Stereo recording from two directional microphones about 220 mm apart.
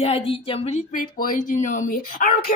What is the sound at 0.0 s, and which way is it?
Speech, 25° left (ahead or behind).